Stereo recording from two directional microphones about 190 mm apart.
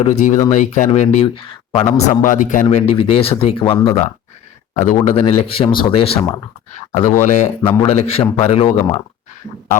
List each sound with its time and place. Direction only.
0.0 s a man's voice: 35° left (ahead or behind)
2.0 s a man's voice: 45° left (ahead or behind)
2.6 s speech: 30° left (ahead or behind)
4.7 s speech: 40° left (ahead or behind)
6.9 s a man's voice: 40° left (ahead or behind)